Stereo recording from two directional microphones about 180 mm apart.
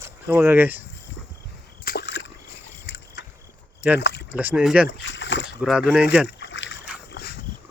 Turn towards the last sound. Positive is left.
turn(degrees=65)  # may be behind; listen again after turning